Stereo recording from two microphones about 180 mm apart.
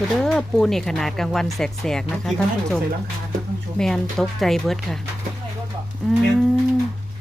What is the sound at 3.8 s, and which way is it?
Speech, 5° left (ahead or behind).